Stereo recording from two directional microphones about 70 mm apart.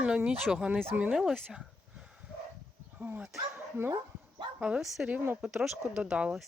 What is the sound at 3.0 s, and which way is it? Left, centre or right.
Speech, right.